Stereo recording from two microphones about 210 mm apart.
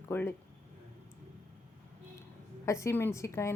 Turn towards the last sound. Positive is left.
turn(degrees=15)  # may be behind; listen again after turning